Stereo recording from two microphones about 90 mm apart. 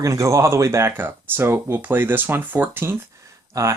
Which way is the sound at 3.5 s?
35° right (ahead or behind).